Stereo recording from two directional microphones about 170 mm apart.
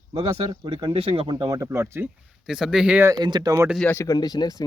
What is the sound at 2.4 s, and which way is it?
Speech, 5° right (ahead or behind).